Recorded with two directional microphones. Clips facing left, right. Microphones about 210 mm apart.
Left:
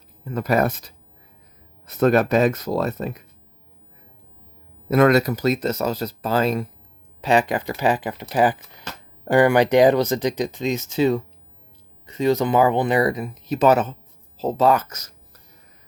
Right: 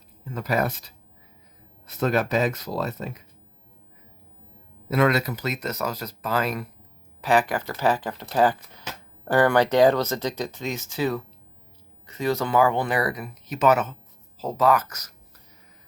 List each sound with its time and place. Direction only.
0.3 s speech: 50° left (ahead or behind)
1.9 s speech: 55° left (ahead or behind)
4.9 s speech: 45° left (ahead or behind); by 15.1 s 25° left (ahead or behind)